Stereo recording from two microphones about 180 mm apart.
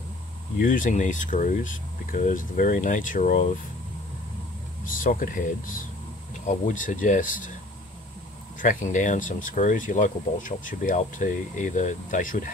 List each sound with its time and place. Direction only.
0.6 s speech: 50° left (ahead or behind)
4.8 s speech: 50° left (ahead or behind)
8.5 s speech: 45° left (ahead or behind)